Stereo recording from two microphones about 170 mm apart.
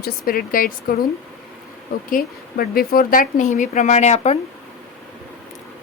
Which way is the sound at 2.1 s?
60° left (ahead or behind).